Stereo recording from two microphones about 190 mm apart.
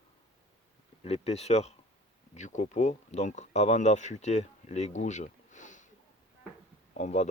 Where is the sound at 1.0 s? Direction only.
35° left (ahead or behind).